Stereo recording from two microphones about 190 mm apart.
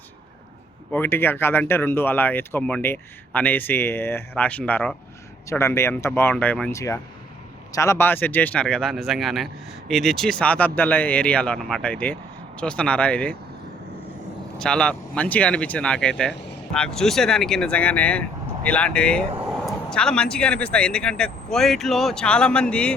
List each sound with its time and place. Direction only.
0.9 s speech: 10° left (ahead or behind)
5.5 s speech: 15° left (ahead or behind)
14.6 s speech: 5° left (ahead or behind)
16.3 s speech: 65° left (ahead or behind)
16.7 s speech: 5° left (ahead or behind)